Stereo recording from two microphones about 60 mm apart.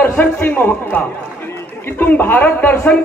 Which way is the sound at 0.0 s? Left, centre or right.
Left.